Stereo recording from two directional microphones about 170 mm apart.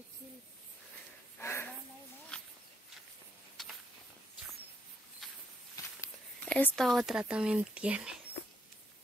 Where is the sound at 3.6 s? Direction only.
Centre (ahead or behind).